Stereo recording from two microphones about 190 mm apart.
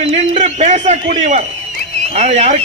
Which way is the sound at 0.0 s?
35° right (ahead or behind).